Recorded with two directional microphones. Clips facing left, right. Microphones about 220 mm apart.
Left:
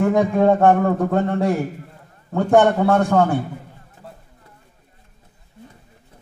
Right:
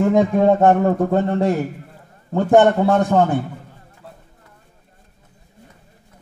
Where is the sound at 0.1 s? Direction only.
20° right (ahead or behind).